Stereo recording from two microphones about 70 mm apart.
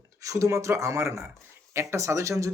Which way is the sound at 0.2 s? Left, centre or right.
Right.